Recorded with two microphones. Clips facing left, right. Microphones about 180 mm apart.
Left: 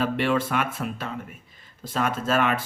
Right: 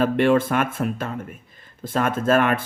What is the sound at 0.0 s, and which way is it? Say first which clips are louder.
Speech: right 6 dB; 50° right (ahead or behind).